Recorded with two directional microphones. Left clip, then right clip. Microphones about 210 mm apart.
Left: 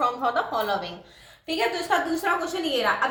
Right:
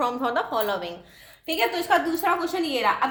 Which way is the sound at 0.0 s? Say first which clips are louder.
Left 1 dB; 45° right (ahead or behind).